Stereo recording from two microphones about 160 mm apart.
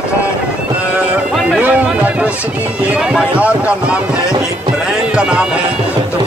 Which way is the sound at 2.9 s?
5° right (ahead or behind).